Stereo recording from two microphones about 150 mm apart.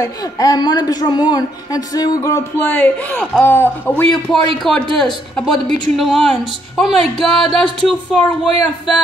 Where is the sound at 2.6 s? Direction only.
10° left (ahead or behind).